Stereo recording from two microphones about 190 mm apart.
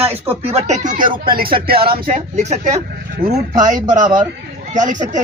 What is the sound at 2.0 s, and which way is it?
Speech, 35° right (ahead or behind).